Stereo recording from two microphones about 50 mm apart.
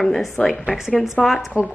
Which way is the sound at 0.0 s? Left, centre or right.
Centre.